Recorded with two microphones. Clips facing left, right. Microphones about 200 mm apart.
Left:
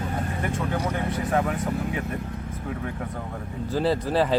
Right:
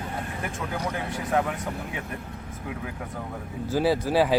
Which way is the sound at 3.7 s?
5° right (ahead or behind).